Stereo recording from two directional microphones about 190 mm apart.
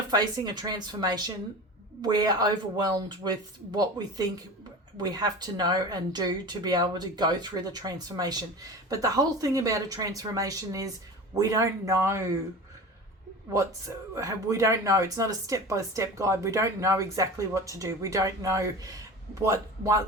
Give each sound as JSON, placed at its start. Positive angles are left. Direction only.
{"t": 0.1, "sound": "speech", "side_deg": -20}
{"t": 13.5, "sound": "speech", "side_deg": -15}